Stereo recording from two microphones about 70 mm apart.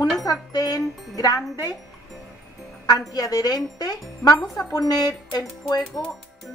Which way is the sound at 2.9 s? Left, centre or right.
Left.